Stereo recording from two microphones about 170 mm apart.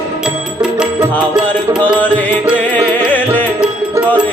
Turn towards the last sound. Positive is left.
turn(degrees=10)  # may be behind; listen again after turning